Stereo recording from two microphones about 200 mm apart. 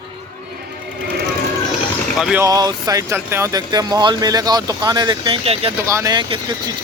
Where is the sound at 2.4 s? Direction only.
20° right (ahead or behind).